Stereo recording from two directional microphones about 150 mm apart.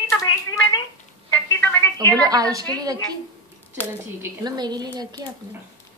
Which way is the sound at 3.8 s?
15° left (ahead or behind).